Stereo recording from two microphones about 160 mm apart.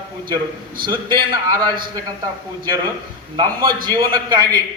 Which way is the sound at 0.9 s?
30° right (ahead or behind).